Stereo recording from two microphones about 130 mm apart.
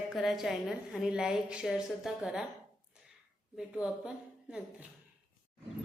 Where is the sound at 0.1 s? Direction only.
Centre (ahead or behind).